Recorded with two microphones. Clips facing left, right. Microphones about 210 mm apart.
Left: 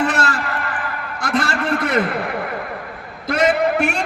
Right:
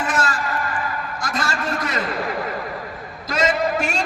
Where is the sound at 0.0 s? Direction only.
65° left (ahead or behind).